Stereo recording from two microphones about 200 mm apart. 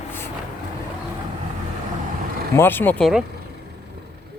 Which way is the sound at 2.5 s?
10° left (ahead or behind).